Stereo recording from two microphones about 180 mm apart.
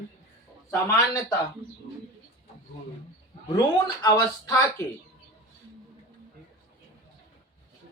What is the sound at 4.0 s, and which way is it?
Speech, 20° left (ahead or behind).